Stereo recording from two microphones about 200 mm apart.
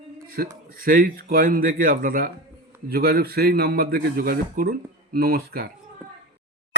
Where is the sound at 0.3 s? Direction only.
45° right (ahead or behind).